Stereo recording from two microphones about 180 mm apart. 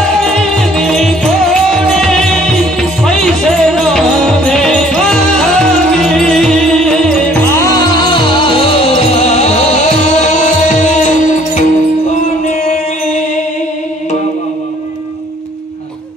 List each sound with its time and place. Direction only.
0.2 s music: centre (ahead or behind)
7.5 s music: 20° left (ahead or behind); by 11.6 s 40° left (ahead or behind)